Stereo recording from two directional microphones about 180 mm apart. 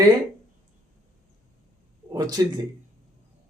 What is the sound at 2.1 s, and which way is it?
Speech, 20° right (ahead or behind).